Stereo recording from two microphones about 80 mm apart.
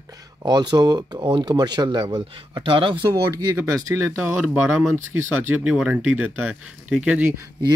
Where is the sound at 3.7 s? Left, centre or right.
Right.